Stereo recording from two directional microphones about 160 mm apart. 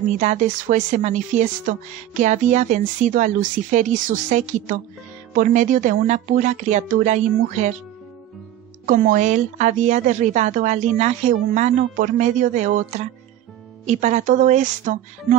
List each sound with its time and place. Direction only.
0.2 s speech: 50° right (ahead or behind)
8.8 s speech: 60° right (ahead or behind)